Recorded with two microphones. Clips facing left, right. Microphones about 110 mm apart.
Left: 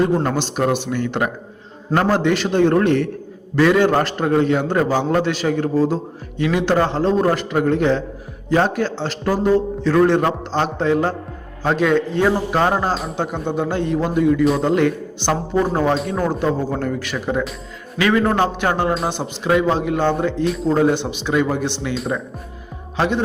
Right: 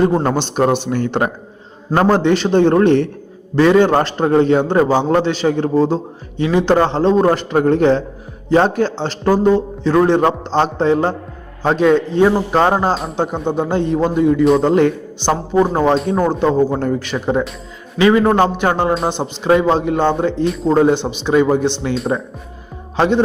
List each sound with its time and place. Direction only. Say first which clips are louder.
0.0 s a man's voice: right 3 dB; 30° right (ahead or behind)
12.9 s a man's voice: right 3 dB; centre (ahead or behind)
13.1 s a man's voice: right 4 dB; 20° right (ahead or behind)
15.2 s a man's voice: right 4 dB; 20° right (ahead or behind)
20.4 s a man's voice: right 2 dB; centre (ahead or behind)
20.7 s a man's voice: right 4 dB; 20° right (ahead or behind)
23.0 s a man's voice: right 5 dB; 30° right (ahead or behind)